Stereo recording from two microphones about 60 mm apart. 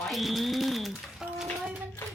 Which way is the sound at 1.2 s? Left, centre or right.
Centre.